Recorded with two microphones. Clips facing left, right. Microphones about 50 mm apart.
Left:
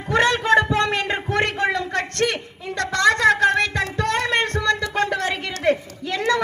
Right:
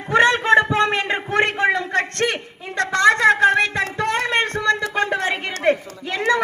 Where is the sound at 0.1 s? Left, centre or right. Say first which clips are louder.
Right 3 dB; right.